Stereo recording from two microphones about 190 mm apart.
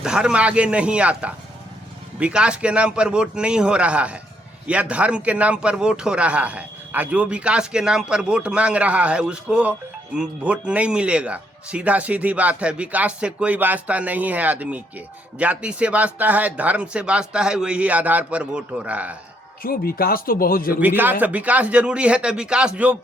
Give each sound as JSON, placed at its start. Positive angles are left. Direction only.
{"t": 0.0, "sound": "a man's voice", "side_deg": -5}
{"t": 19.6, "sound": "speech", "side_deg": 50}
{"t": 20.8, "sound": "speech", "side_deg": -10}